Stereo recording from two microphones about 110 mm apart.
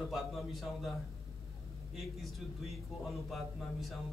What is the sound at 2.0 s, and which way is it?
A man's voice, centre (ahead or behind).